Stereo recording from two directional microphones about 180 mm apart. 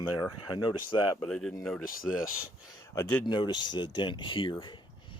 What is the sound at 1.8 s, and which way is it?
Speech, 50° left (ahead or behind).